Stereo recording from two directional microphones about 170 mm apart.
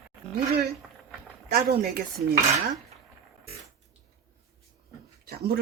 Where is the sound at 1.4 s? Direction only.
70° right (ahead or behind).